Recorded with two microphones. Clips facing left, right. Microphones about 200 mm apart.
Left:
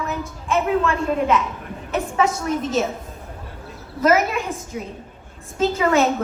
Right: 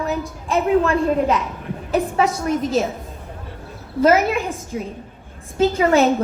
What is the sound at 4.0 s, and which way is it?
Speech, 30° right (ahead or behind).